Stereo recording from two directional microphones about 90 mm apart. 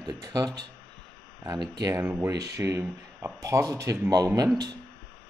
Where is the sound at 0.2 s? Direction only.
45° right (ahead or behind).